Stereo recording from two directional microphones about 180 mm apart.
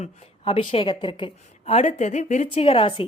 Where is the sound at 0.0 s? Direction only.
35° left (ahead or behind).